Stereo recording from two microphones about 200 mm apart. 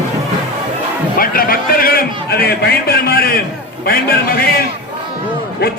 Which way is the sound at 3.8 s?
50° left (ahead or behind).